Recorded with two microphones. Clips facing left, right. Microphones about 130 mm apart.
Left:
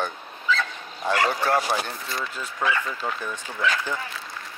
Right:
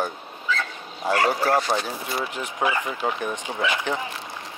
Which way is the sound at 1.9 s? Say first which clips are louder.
Right 3 dB; 10° right (ahead or behind).